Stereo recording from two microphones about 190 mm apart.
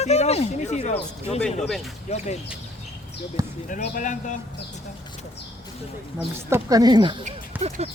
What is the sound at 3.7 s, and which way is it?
Speech, 40° left (ahead or behind).